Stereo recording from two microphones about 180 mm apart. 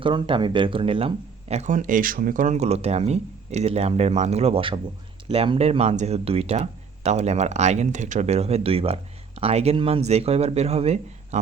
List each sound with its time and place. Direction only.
0.0 s speech: 25° right (ahead or behind)